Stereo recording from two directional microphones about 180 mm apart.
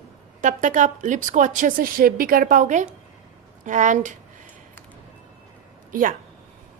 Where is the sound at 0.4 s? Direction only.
45° right (ahead or behind).